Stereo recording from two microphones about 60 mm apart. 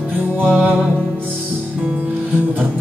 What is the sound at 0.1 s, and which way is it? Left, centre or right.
Music, right.